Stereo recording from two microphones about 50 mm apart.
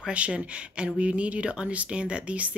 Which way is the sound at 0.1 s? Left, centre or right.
Right.